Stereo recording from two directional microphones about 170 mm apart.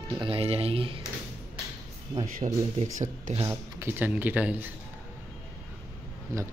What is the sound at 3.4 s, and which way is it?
Speech, 15° right (ahead or behind).